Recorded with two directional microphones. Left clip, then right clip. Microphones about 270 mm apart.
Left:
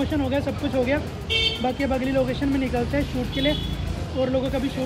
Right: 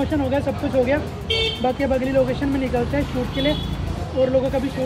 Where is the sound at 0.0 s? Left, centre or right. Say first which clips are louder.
Right 3 dB; centre.